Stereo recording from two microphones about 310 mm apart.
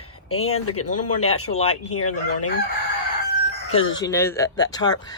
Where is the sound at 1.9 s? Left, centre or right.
Left.